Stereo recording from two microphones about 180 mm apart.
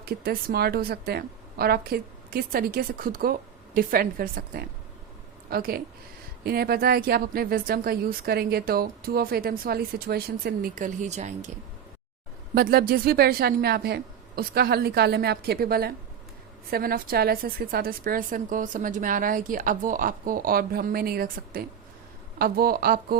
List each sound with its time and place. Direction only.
0.0 s a woman's voice: 60° right (ahead or behind); by 11.5 s 40° right (ahead or behind)
12.5 s a woman's voice: 55° right (ahead or behind)